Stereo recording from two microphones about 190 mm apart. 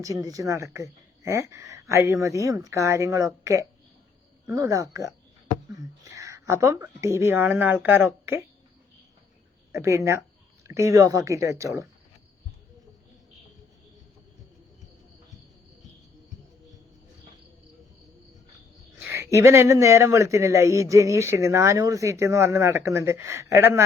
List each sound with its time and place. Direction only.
0.0 s speech: 15° right (ahead or behind)
9.7 s speech: 15° right (ahead or behind)
19.0 s speech: 10° right (ahead or behind)